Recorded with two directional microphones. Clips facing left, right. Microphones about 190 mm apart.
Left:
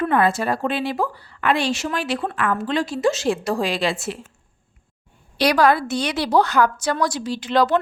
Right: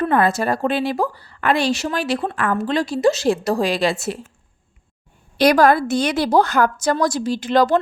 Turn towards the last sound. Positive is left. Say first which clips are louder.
# right 2 dB
turn(degrees=-45)  # may be behind; listen again after turning